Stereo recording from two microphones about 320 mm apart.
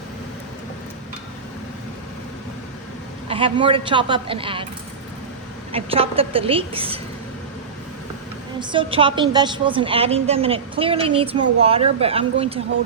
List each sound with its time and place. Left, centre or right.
3.2 s a woman's voice: centre
5.7 s a woman's voice: centre
8.7 s a woman's voice: centre